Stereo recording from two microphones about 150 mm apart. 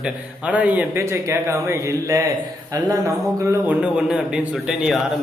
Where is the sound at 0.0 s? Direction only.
10° right (ahead or behind).